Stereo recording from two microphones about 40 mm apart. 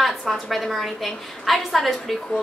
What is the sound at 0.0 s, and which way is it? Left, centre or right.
A woman's voice, centre.